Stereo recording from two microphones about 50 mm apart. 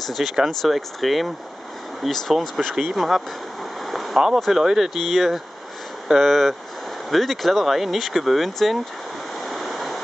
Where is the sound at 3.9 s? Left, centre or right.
Centre.